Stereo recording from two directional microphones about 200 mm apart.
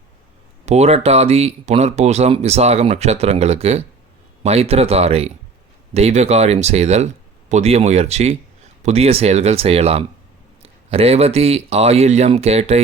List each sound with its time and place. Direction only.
0.6 s speech: 35° right (ahead or behind)